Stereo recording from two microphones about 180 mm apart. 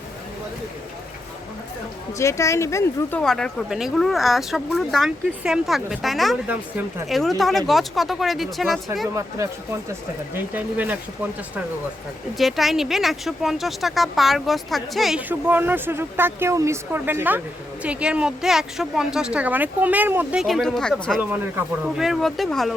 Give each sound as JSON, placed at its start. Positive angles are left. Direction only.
{"t": 2.1, "sound": "speech", "side_deg": 15}
{"t": 3.2, "sound": "speech", "side_deg": 5}
{"t": 9.4, "sound": "speech", "side_deg": -20}